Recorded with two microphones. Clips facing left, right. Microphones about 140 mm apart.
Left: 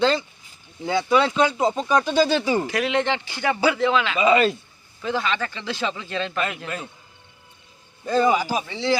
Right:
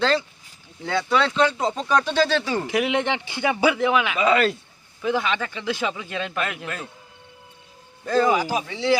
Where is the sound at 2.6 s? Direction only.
20° right (ahead or behind).